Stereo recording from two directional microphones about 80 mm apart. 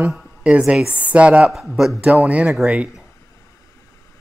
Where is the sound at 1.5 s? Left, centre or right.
Centre.